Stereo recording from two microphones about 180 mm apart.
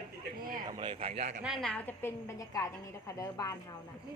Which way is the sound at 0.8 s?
30° right (ahead or behind).